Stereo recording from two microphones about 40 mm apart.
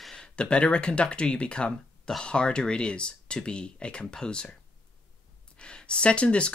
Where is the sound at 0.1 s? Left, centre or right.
Left.